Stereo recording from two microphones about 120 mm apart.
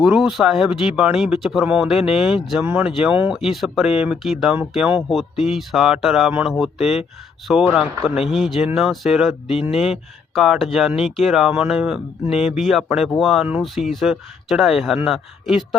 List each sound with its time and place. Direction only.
0.0 s speech: 5° right (ahead or behind)
9.5 s speech: 55° left (ahead or behind)
9.7 s speech: centre (ahead or behind)